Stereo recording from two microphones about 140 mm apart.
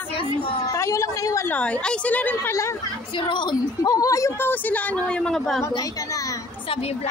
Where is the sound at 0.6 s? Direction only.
20° left (ahead or behind).